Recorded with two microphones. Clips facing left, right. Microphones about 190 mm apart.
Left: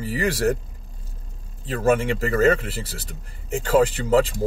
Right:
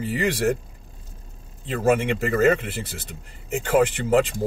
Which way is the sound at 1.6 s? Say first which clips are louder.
Even; 15° right (ahead or behind).